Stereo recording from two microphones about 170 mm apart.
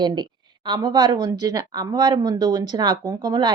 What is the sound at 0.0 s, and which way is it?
A woman's voice, 25° right (ahead or behind).